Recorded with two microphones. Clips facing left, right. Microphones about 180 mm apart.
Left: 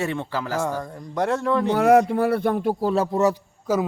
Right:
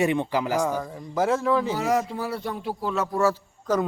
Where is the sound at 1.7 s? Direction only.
60° left (ahead or behind); by 3.0 s 40° left (ahead or behind).